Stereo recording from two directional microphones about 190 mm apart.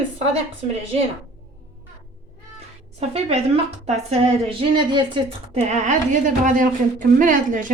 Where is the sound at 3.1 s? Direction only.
30° right (ahead or behind).